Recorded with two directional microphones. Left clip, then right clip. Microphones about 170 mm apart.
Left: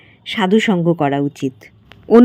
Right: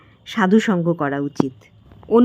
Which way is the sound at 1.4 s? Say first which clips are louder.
Left 6 dB; 20° left (ahead or behind).